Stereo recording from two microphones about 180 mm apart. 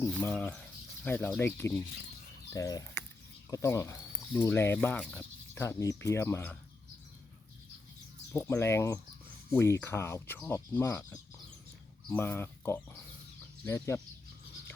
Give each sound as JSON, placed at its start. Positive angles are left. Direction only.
{"t": 0.0, "sound": "speech", "side_deg": 10}
{"t": 8.3, "sound": "speech", "side_deg": 15}